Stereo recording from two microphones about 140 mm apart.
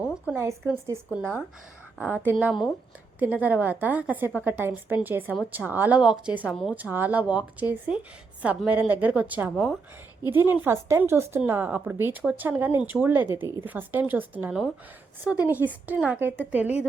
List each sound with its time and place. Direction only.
0.3 s a woman's voice: 15° right (ahead or behind)
6.5 s speech: centre (ahead or behind)
6.7 s a woman's voice: 10° right (ahead or behind)